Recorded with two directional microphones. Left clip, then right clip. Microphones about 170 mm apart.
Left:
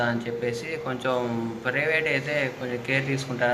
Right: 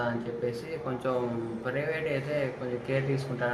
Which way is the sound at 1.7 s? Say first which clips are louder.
Left 7 dB; 10° left (ahead or behind).